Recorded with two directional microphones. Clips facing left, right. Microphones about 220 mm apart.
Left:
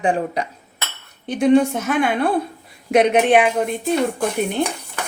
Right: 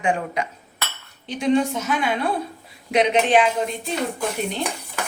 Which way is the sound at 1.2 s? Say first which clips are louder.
Left 5 dB; 55° left (ahead or behind).